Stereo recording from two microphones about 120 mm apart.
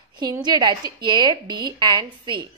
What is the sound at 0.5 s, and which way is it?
A woman's voice, 35° right (ahead or behind).